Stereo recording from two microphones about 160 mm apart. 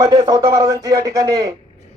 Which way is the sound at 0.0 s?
20° right (ahead or behind).